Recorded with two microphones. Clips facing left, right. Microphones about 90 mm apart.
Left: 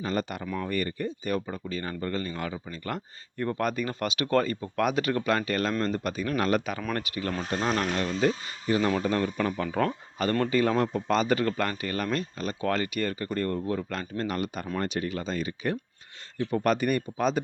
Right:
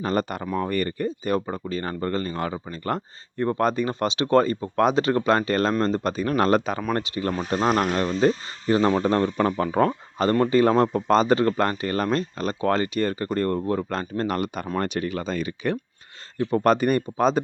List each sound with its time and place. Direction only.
0.0 s speech: 45° right (ahead or behind); by 7.3 s 30° right (ahead or behind)
7.5 s speech: 40° right (ahead or behind); by 15.8 s 70° right (ahead or behind)
16.5 s speech: 35° right (ahead or behind)